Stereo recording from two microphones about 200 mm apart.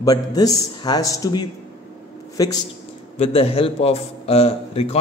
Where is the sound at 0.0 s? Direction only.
20° left (ahead or behind).